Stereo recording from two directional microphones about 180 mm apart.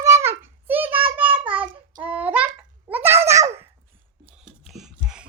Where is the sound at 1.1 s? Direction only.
10° right (ahead or behind).